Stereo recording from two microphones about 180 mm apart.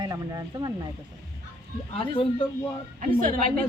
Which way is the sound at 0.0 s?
20° right (ahead or behind).